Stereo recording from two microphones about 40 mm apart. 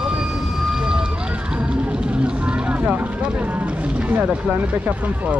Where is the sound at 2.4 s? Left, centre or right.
Right.